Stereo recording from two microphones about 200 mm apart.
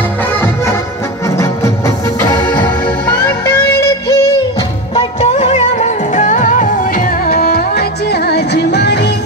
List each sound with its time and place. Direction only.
2.2 s music: 20° left (ahead or behind)
4.9 s music: 30° left (ahead or behind); by 9.1 s 55° left (ahead or behind)